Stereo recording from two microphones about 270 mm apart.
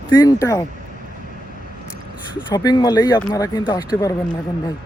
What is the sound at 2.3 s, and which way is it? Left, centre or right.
A man's voice, centre.